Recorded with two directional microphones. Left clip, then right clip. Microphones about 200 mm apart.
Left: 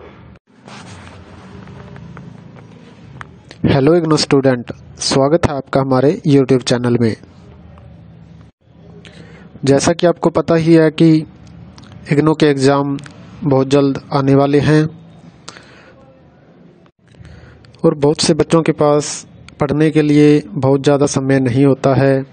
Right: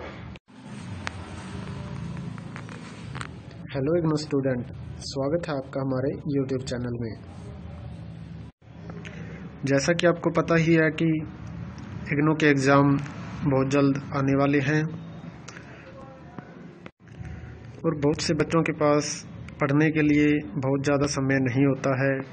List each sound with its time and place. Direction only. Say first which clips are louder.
3.6 s speech: left 13 dB; 55° left (ahead or behind)
9.7 s a man's voice: left 10 dB; 65° left (ahead or behind)
17.8 s a man's voice: left 12 dB; 65° left (ahead or behind)